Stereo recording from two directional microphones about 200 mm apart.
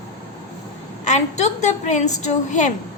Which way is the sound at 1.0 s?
35° left (ahead or behind).